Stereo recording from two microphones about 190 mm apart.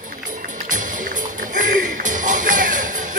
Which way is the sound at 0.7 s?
45° right (ahead or behind).